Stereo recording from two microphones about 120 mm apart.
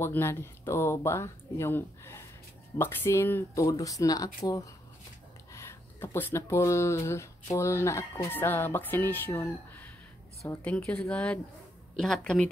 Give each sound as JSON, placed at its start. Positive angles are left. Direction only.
{"t": 0.0, "sound": "speech", "side_deg": 20}
{"t": 5.5, "sound": "speech", "side_deg": 20}